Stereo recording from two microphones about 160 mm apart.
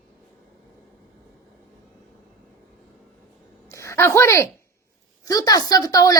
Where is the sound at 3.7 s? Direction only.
20° left (ahead or behind).